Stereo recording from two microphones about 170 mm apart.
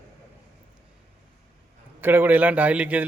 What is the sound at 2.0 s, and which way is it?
A man's voice, 10° right (ahead or behind).